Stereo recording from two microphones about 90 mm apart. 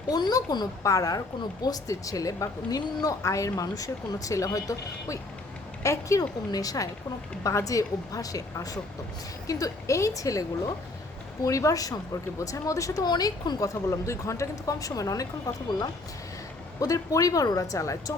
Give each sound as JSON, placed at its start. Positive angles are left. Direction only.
{"t": 0.1, "sound": "speech", "side_deg": 50}
{"t": 11.4, "sound": "speech", "side_deg": 35}
{"t": 13.6, "sound": "speech", "side_deg": 35}
{"t": 16.8, "sound": "speech", "side_deg": 40}